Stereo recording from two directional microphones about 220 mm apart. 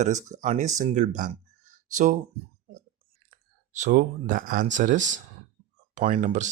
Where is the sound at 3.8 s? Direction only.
35° right (ahead or behind).